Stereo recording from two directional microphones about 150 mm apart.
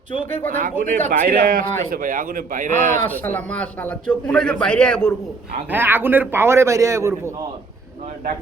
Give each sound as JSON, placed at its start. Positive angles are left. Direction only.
{"t": 0.4, "sound": "a man's voice", "side_deg": -65}
{"t": 3.0, "sound": "a man's voice", "side_deg": 15}
{"t": 5.7, "sound": "a man's voice", "side_deg": -15}